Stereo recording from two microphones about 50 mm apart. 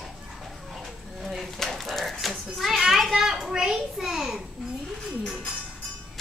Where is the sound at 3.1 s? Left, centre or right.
Centre.